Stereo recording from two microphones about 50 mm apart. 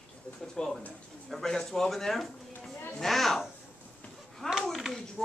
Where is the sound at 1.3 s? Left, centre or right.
Centre.